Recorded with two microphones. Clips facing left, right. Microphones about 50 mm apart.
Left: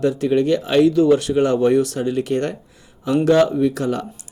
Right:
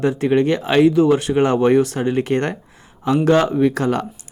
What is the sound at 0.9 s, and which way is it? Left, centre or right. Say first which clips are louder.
Speech: even; right.